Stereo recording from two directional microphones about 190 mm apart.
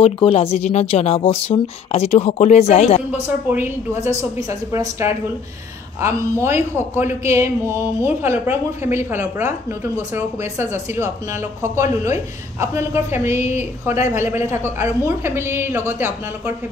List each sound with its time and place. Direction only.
0.0 s speech: 30° left (ahead or behind)
3.4 s a man's voice: 10° right (ahead or behind)